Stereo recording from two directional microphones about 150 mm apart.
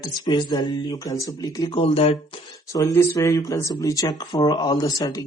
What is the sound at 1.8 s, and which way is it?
Speech, 40° left (ahead or behind).